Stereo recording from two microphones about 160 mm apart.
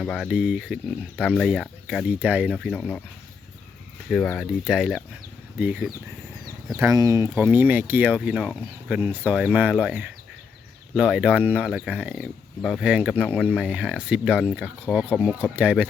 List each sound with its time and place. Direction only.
0.0 s speech: centre (ahead or behind)
4.1 s speech: 5° left (ahead or behind)
6.7 s speech: 20° right (ahead or behind)
13.2 s speech: 5° left (ahead or behind)
13.6 s speech: 5° right (ahead or behind)